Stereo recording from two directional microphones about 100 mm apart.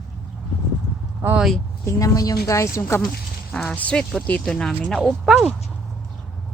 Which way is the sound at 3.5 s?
15° left (ahead or behind).